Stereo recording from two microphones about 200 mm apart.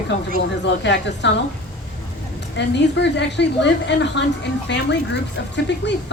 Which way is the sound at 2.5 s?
60° left (ahead or behind).